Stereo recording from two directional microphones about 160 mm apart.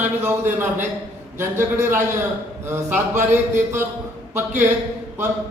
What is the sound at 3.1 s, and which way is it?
Speech, 50° right (ahead or behind).